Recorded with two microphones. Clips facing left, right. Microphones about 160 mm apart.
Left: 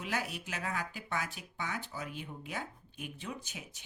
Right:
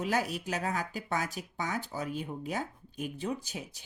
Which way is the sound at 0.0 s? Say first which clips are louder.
Right 7 dB; 40° right (ahead or behind).